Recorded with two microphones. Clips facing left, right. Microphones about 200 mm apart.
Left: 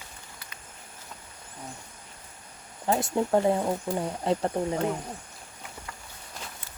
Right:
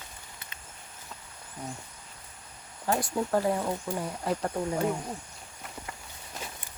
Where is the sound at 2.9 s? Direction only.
25° left (ahead or behind).